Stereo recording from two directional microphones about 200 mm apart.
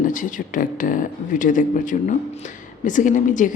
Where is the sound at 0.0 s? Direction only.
40° left (ahead or behind).